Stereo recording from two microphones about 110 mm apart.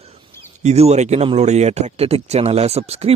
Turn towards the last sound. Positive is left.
turn(degrees=-75)  # may be behind; listen again after turning